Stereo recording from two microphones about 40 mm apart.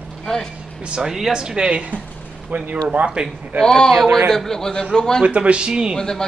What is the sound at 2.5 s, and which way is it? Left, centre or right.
Speech, right.